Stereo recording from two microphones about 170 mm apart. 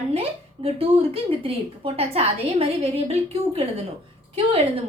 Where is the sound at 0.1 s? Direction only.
35° right (ahead or behind).